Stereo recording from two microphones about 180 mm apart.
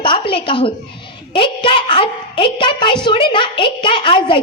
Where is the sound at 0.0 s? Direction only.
30° left (ahead or behind).